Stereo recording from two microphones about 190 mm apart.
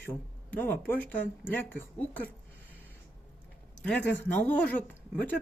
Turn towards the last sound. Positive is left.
turn(degrees=5)  # may be behind; listen again after turning